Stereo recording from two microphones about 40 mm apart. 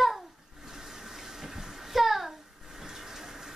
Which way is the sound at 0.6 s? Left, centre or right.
Centre.